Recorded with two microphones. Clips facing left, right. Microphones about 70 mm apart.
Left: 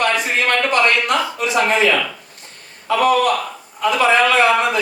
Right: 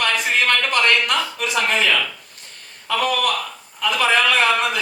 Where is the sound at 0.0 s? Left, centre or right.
Left.